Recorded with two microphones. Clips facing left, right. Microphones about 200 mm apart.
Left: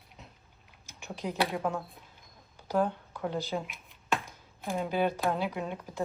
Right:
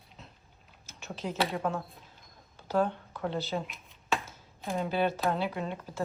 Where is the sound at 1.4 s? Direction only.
Centre (ahead or behind).